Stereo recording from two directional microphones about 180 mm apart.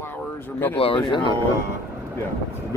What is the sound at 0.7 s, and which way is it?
Speech, 25° left (ahead or behind).